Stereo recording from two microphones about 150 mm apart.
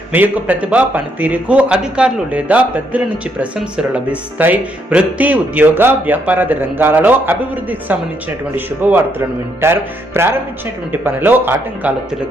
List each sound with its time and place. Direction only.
0.1 s speech: 10° right (ahead or behind)